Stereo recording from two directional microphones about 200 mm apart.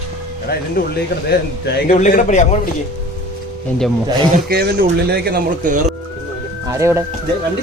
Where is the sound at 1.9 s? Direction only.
40° left (ahead or behind).